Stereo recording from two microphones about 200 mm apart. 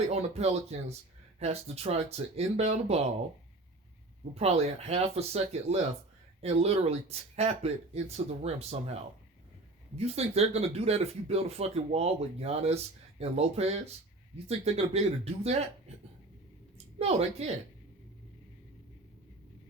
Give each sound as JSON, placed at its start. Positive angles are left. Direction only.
{"t": 0.1, "sound": "speech", "side_deg": -30}
{"t": 4.4, "sound": "speech", "side_deg": -30}
{"t": 10.0, "sound": "speech", "side_deg": -30}
{"t": 16.7, "sound": "a sound", "side_deg": -30}